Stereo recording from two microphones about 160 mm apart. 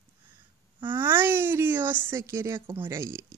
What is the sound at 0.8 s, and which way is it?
Speech, 10° right (ahead or behind).